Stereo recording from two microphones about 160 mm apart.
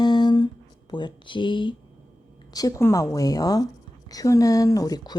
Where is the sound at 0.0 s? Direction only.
25° left (ahead or behind).